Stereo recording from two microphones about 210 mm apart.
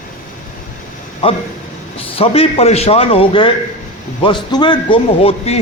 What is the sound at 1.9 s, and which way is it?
A man's voice, 30° left (ahead or behind).